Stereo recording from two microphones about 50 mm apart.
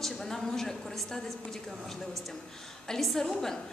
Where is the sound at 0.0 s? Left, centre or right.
Centre.